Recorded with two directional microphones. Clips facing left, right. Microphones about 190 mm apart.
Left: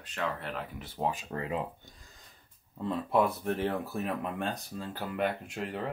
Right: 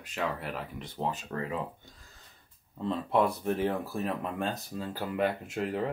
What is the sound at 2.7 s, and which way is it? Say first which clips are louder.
Speech: even; 5° left (ahead or behind).